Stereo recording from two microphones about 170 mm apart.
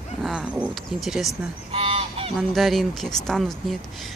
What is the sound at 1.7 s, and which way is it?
Goose, 35° right (ahead or behind).